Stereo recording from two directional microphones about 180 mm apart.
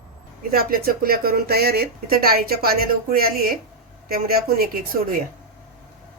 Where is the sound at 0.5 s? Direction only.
55° right (ahead or behind).